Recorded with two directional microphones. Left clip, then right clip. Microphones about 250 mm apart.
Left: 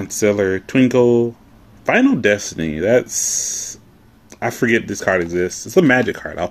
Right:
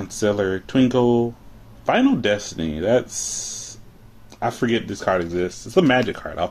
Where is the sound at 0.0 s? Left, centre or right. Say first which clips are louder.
Left 5 dB; left.